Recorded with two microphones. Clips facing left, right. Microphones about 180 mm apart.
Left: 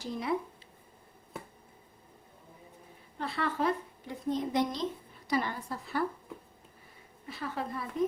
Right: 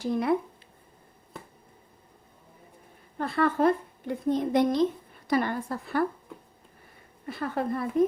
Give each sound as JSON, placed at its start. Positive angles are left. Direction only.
{"t": 0.0, "sound": "a woman's voice", "side_deg": -55}
{"t": 3.2, "sound": "a woman's voice", "side_deg": -50}
{"t": 7.3, "sound": "speech", "side_deg": -55}